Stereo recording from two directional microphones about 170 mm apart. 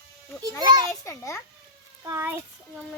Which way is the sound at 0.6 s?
25° right (ahead or behind).